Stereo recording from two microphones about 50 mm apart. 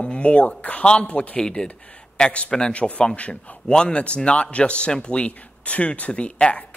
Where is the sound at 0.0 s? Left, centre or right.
Left.